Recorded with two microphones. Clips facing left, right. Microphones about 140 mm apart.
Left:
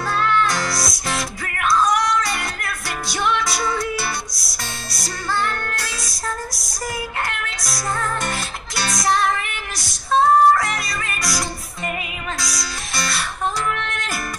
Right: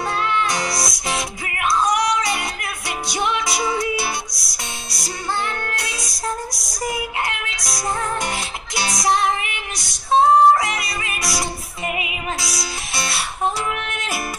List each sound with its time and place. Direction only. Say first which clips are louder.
0.8 s music: even; centre (ahead or behind)
1.7 s music: left 1 dB; 20° right (ahead or behind)
3.8 s music: right 2 dB; centre (ahead or behind)
8.7 s music: even; 25° right (ahead or behind)
10.1 s music: right 1 dB; 20° right (ahead or behind)
10.6 s music: even; centre (ahead or behind)
12.4 s music: right 1 dB; centre (ahead or behind)